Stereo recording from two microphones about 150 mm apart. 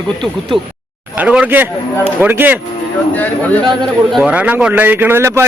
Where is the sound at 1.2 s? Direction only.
10° right (ahead or behind).